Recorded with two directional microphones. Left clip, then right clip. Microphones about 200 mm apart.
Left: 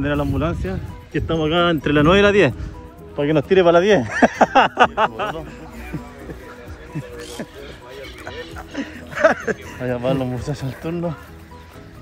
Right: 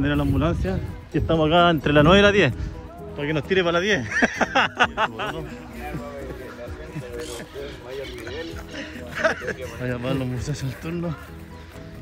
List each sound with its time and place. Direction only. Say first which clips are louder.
0.0 s speech: left 2 dB; 5° right (ahead or behind)
3.2 s speech: left 7 dB; centre (ahead or behind)
8.7 s chuckle: left 5 dB; 25° left (ahead or behind)
9.8 s speech: left 7 dB; centre (ahead or behind)